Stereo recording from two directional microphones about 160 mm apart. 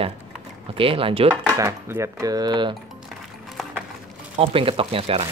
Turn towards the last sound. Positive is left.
turn(degrees=-35)  # may be behind; listen again after turning